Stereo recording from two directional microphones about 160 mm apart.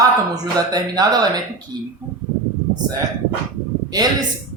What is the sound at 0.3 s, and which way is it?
Speech, 25° right (ahead or behind).